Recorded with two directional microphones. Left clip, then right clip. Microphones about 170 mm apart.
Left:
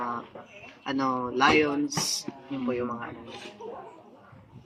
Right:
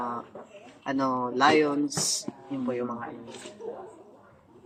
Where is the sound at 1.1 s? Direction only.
20° right (ahead or behind).